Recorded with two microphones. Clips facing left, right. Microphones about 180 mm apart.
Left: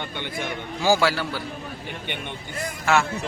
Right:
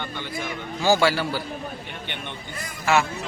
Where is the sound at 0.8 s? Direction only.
10° left (ahead or behind).